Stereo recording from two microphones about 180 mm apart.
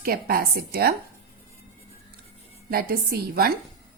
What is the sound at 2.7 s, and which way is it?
Speech, 55° right (ahead or behind).